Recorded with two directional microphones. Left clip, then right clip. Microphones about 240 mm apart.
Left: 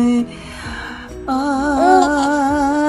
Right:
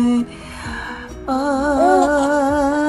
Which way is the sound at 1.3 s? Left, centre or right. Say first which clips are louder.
Even; centre.